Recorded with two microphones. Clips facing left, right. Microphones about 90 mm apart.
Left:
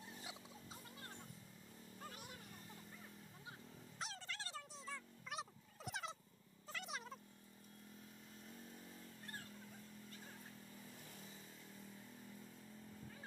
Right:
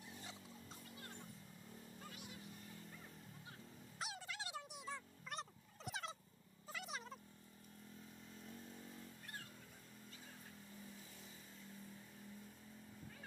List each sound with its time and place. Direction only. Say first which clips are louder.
2.0 s music: left 3 dB; 45° left (ahead or behind)
4.0 s music: right 1 dB; 10° right (ahead or behind)
5.3 s turkey: left 1 dB; centre (ahead or behind)
6.7 s a sound: even; centre (ahead or behind)